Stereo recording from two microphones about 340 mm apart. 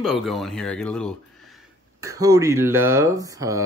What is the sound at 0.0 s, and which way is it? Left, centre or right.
Speech, centre.